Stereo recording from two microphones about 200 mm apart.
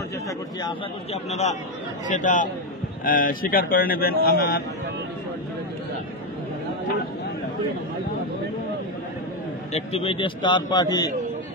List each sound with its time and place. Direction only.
1.1 s a man's voice: 35° left (ahead or behind)
9.7 s a man's voice: 30° left (ahead or behind)